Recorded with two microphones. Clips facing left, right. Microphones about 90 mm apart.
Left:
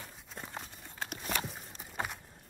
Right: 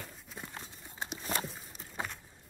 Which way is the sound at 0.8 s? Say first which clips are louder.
Right 3 dB; 20° right (ahead or behind).